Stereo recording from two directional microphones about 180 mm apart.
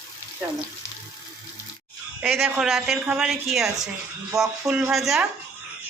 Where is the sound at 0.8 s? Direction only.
15° left (ahead or behind).